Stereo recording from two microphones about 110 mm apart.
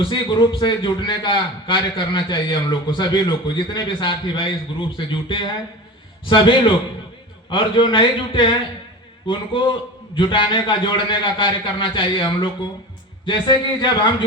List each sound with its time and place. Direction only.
0.0 s a man's voice: 45° left (ahead or behind)